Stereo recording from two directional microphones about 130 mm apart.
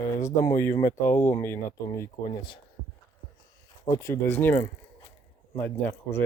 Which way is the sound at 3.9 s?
20° left (ahead or behind).